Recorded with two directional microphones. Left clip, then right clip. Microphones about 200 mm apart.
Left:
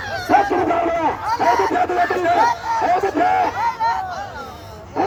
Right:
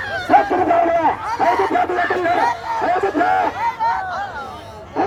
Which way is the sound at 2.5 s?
45° left (ahead or behind).